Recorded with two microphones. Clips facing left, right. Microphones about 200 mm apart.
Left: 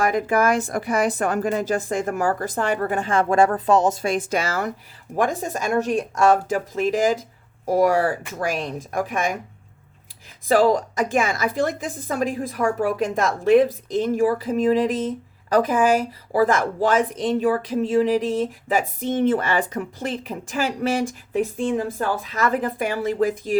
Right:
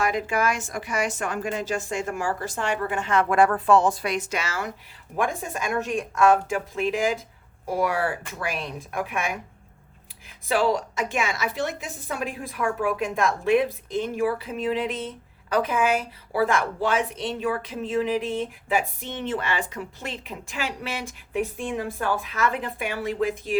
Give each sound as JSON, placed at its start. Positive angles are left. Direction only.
{"t": 0.0, "sound": "speech", "side_deg": 50}
{"t": 1.0, "sound": "a woman's voice", "side_deg": 40}
{"t": 1.7, "sound": "speech", "side_deg": 55}
{"t": 2.2, "sound": "a woman's voice", "side_deg": 40}
{"t": 3.7, "sound": "a woman's voice", "side_deg": 40}
{"t": 10.5, "sound": "a woman's voice", "side_deg": 45}